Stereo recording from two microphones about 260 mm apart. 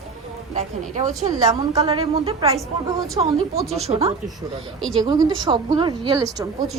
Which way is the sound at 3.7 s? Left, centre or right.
Right.